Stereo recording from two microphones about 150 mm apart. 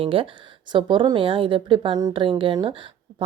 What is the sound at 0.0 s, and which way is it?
Speech, 35° right (ahead or behind).